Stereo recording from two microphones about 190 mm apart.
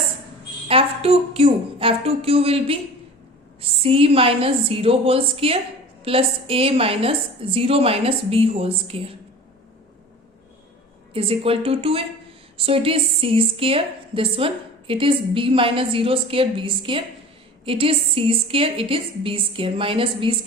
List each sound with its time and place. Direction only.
0.7 s a woman's voice: 30° right (ahead or behind)
11.1 s a woman's voice: 30° right (ahead or behind)